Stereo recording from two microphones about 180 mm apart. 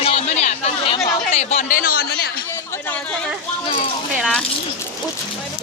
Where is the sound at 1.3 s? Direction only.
40° left (ahead or behind); by 2.3 s 60° left (ahead or behind).